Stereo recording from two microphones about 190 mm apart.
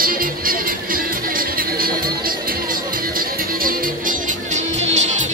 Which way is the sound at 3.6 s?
45° right (ahead or behind).